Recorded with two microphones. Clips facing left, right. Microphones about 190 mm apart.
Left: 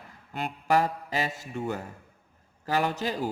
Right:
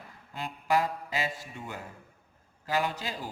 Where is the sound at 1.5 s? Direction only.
50° left (ahead or behind).